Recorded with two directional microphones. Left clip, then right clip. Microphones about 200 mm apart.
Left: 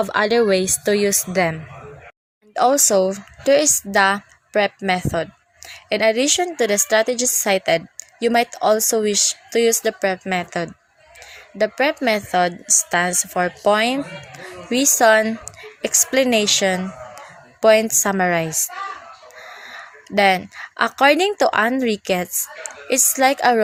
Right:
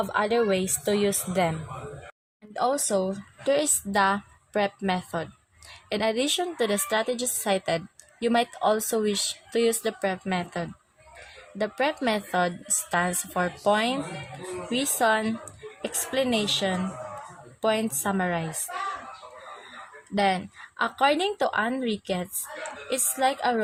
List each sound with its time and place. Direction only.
0.0 s a woman's voice: 15° left (ahead or behind)
20.1 s a woman's voice: 15° left (ahead or behind)